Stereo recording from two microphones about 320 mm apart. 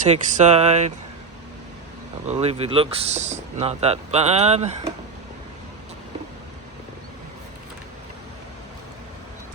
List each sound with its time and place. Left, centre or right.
0.1 s speech: right
2.2 s speech: centre